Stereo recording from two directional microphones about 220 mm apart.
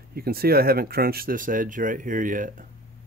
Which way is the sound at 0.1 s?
45° right (ahead or behind).